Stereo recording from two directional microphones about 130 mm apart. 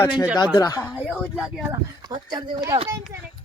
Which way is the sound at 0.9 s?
Centre (ahead or behind).